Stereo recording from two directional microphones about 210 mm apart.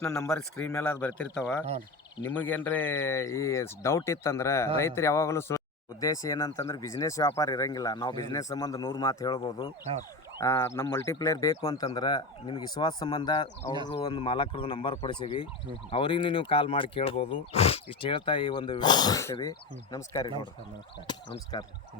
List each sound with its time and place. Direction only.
0.3 s speech: 5° left (ahead or behind)
21.5 s speech: 25° left (ahead or behind)